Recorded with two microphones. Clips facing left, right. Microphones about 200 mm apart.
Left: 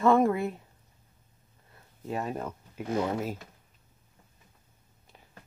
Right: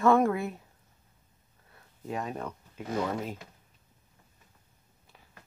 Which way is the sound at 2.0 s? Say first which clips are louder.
Left 2 dB; 5° left (ahead or behind).